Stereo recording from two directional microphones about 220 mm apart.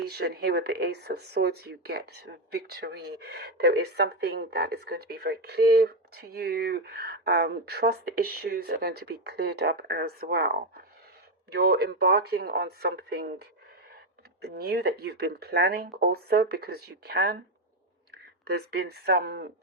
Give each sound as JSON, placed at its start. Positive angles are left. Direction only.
{"t": 0.1, "sound": "speech", "side_deg": -45}
{"t": 18.4, "sound": "speech", "side_deg": -45}